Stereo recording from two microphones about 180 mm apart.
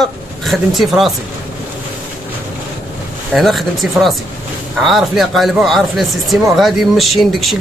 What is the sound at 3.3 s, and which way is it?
Speech, centre (ahead or behind).